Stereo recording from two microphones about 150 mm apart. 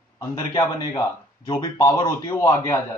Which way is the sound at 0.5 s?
25° left (ahead or behind).